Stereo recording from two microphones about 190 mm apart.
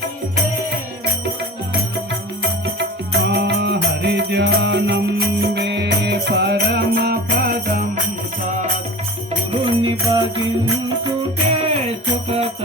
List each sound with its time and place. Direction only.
2.7 s music: 65° right (ahead or behind)
9.5 s music: 25° right (ahead or behind)